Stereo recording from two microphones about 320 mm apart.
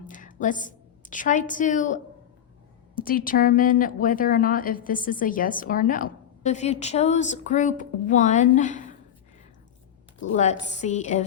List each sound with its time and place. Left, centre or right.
0.1 s a woman's voice: left
10.3 s speech: left